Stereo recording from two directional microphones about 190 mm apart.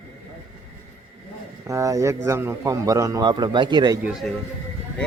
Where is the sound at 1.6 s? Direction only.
15° right (ahead or behind).